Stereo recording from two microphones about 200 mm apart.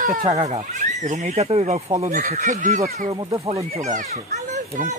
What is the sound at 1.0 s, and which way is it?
Speech, 35° right (ahead or behind).